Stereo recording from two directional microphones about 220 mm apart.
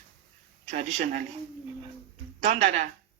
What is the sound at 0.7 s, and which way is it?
Speech, 35° right (ahead or behind).